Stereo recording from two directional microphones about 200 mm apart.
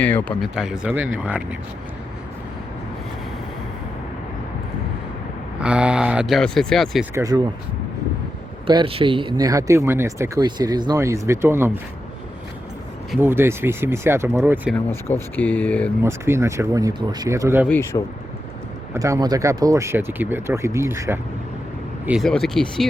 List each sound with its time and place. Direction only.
0.0 s speech: 10° left (ahead or behind)
0.5 s speech: 5° right (ahead or behind)
5.5 s speech: 5° right (ahead or behind)
7.1 s speech: 15° right (ahead or behind)
8.6 s speech: 25° right (ahead or behind)
13.1 s speech: 10° right (ahead or behind)
14.8 s speech: 10° left (ahead or behind)
16.0 s speech: 15° right (ahead or behind)
17.9 s speech: 25° left (ahead or behind)
18.9 s speech: 15° right (ahead or behind)
22.0 s speech: centre (ahead or behind)